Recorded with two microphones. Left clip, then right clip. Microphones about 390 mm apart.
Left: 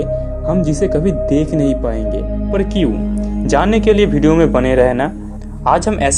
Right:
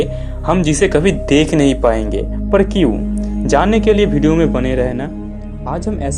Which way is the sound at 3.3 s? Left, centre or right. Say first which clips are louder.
Right 1 dB; centre.